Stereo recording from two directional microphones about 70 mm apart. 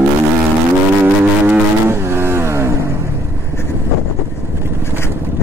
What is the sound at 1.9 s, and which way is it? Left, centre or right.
Vehicle, right.